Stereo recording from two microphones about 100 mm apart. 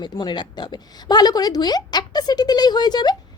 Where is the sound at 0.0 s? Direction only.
45° left (ahead or behind).